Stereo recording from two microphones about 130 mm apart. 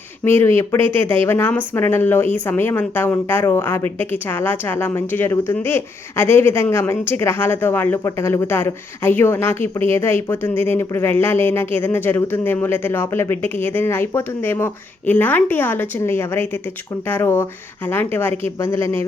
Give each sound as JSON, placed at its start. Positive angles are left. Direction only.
{"t": 0.3, "sound": "speech", "side_deg": 20}